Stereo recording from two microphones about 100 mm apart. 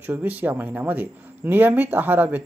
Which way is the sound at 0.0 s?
15° right (ahead or behind).